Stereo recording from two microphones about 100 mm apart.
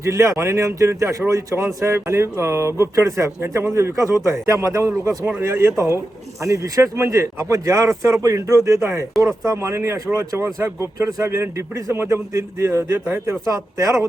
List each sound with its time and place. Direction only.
0.0 s speech: 30° right (ahead or behind)